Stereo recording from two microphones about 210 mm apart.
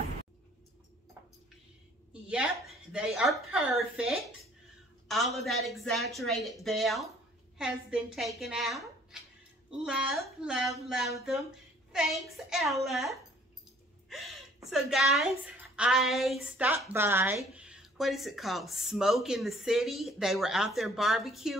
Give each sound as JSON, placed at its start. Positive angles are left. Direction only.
{"t": 2.9, "sound": "a woman's voice", "side_deg": -5}